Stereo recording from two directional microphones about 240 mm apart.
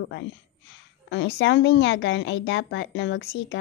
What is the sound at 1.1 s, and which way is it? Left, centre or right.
Speech, left.